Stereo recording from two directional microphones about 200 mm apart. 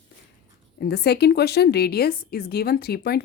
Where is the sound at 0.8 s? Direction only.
55° left (ahead or behind).